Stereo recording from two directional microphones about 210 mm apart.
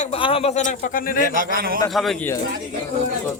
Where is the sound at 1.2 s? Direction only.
40° right (ahead or behind).